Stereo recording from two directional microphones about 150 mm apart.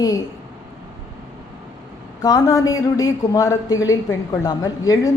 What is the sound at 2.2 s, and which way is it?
Speech, 25° left (ahead or behind).